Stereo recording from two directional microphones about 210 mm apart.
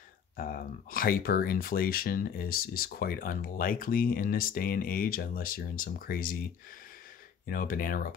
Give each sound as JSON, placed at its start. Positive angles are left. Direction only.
{"t": 0.4, "sound": "speech", "side_deg": 45}
{"t": 7.4, "sound": "speech", "side_deg": 45}